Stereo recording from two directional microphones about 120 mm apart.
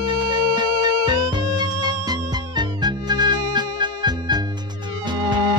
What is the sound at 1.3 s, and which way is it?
Music, 40° right (ahead or behind).